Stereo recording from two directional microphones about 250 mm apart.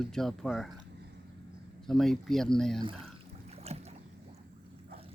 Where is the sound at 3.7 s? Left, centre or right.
Right.